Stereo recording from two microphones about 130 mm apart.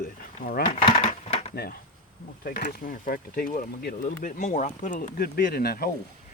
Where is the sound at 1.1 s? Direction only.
50° left (ahead or behind).